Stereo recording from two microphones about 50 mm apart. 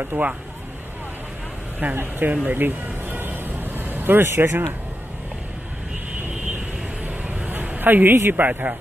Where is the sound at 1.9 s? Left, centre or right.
Right.